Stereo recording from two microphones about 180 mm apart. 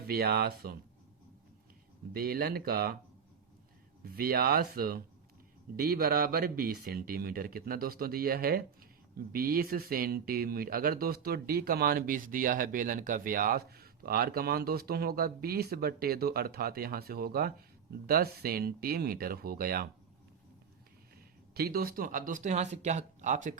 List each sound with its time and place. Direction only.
0.0 s speech: 60° right (ahead or behind)
2.1 s speech: 55° right (ahead or behind)
4.0 s speech: 55° right (ahead or behind)
21.5 s speech: 60° right (ahead or behind)